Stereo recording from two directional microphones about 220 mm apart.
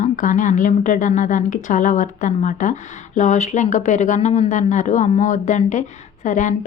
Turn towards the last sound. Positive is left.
turn(degrees=35)  # may be behind; listen again after turning